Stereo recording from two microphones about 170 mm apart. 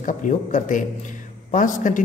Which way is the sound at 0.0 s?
50° left (ahead or behind).